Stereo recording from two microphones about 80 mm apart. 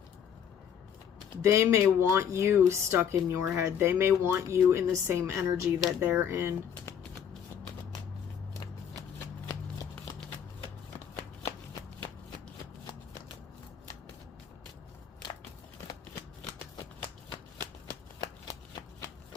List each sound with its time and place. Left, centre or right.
1.4 s speech: right